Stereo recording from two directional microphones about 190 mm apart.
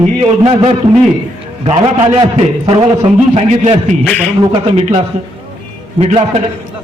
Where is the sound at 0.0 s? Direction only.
35° right (ahead or behind).